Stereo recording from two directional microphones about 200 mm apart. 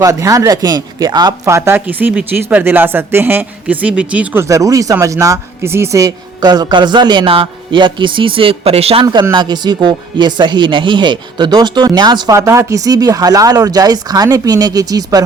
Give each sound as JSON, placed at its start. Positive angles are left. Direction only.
{"t": 0.0, "sound": "speech", "side_deg": -15}